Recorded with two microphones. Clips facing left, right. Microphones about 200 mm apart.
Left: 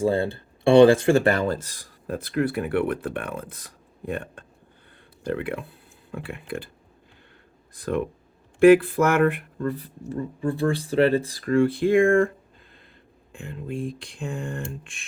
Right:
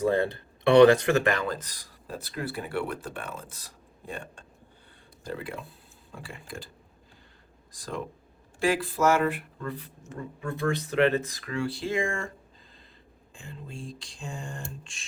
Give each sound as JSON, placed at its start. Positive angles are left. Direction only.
{"t": 0.0, "sound": "speech", "side_deg": 30}
{"t": 7.7, "sound": "speech", "side_deg": 60}
{"t": 11.4, "sound": "speech", "side_deg": 50}
{"t": 13.3, "sound": "speech", "side_deg": 60}